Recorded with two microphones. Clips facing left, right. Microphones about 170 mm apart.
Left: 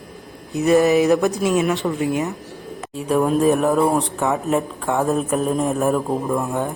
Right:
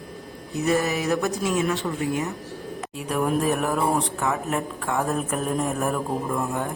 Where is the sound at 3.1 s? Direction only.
25° left (ahead or behind).